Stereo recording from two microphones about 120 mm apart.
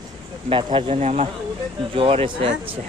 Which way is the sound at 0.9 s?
70° right (ahead or behind).